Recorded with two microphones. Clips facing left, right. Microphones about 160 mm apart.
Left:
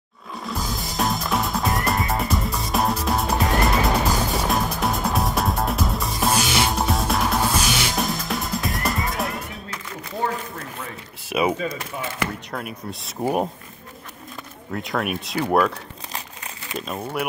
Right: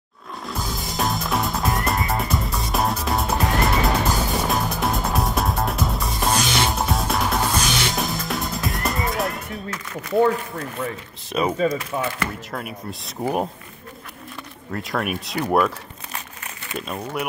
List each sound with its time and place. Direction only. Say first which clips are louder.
0.5 s music: even; centre (ahead or behind)
11.2 s speech: left 1 dB; 10° left (ahead or behind)
11.9 s speech: right 6 dB; 50° right (ahead or behind)
12.4 s speech: even; centre (ahead or behind)
14.7 s speech: even; centre (ahead or behind)
16.7 s speech: even; centre (ahead or behind)